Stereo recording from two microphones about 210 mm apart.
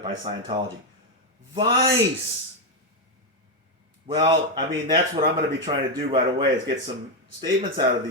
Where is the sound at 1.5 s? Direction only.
20° right (ahead or behind).